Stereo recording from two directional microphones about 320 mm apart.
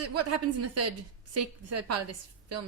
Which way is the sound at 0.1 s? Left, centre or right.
Right.